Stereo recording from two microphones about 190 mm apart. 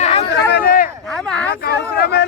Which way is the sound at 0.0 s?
30° left (ahead or behind).